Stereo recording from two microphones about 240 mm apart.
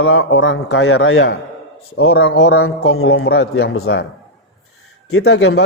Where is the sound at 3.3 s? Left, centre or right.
Left.